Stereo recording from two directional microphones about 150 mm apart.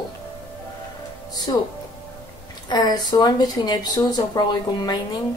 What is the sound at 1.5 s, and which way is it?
Speech, 30° left (ahead or behind).